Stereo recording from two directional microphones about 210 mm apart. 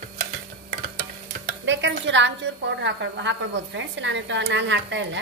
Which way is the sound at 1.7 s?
60° right (ahead or behind).